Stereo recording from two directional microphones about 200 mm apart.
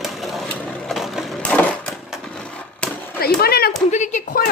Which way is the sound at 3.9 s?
35° left (ahead or behind).